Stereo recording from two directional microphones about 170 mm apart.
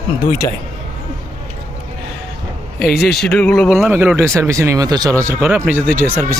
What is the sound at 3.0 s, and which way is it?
Speech, 70° left (ahead or behind).